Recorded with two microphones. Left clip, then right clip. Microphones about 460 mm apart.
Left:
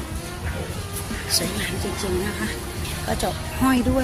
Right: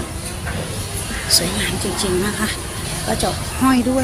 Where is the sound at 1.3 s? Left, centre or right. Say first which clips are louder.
Right 6 dB; left.